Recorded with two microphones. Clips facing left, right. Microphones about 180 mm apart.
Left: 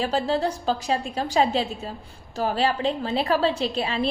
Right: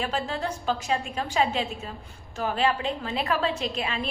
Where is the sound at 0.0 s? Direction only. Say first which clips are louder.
Left 6 dB; 35° left (ahead or behind).